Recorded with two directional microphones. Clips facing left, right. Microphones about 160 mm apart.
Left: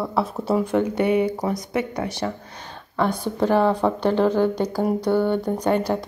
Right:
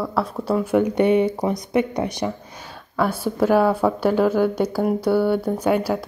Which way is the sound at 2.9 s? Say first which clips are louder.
Right 1 dB; 5° right (ahead or behind).